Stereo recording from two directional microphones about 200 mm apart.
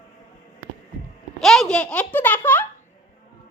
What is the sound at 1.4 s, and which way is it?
Speech, centre (ahead or behind).